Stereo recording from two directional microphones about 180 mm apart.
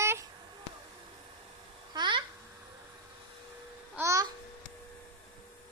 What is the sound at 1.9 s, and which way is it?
Speech, 25° right (ahead or behind).